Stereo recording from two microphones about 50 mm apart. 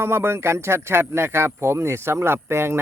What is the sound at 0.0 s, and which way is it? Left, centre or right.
Speech, right.